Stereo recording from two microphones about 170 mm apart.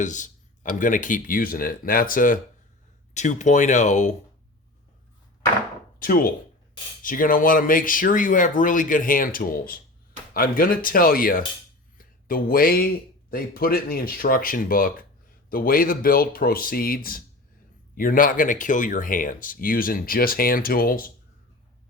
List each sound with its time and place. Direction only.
0.0 s speech: 45° left (ahead or behind)
6.0 s speech: 55° left (ahead or behind)